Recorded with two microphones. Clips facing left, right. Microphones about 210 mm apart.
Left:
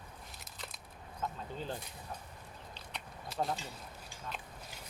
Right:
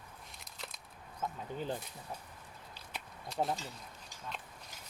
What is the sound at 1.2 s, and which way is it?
Speech, 15° right (ahead or behind).